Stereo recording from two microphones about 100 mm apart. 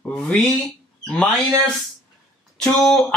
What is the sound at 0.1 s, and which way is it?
Speech, 10° left (ahead or behind).